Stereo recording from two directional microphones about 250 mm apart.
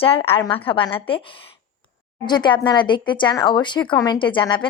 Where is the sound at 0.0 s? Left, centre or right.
Left.